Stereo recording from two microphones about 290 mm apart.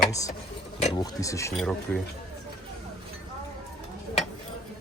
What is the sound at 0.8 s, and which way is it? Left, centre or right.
Speech, left.